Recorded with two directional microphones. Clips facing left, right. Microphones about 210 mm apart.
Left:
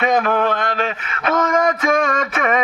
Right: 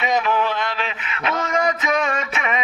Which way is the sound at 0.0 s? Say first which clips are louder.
Left 4 dB; 50° left (ahead or behind).